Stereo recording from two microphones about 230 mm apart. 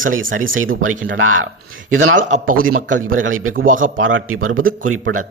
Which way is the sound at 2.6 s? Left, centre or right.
Right.